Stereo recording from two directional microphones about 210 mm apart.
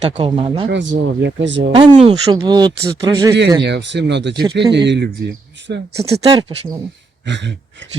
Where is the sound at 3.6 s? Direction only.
55° right (ahead or behind).